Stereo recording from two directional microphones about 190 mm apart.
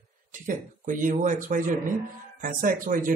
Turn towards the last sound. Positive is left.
turn(degrees=-45)  # may be behind; listen again after turning